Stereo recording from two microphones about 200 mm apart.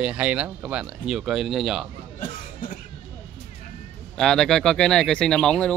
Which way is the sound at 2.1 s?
45° left (ahead or behind).